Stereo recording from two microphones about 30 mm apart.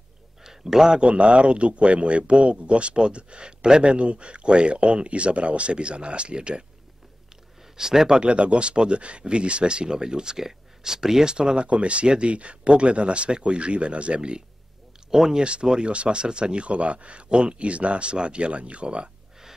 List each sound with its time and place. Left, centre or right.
0.4 s a sound: centre
1.0 s speech: right
7.7 s speech: centre
8.2 s speech: right; by 11.3 s centre
11.3 s speech: right
15.0 s speech: centre
15.3 s speech: right
17.3 s speech: right
17.6 s speech: right